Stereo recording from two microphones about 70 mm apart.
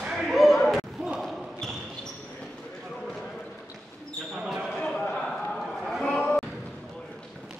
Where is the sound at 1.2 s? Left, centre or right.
Centre.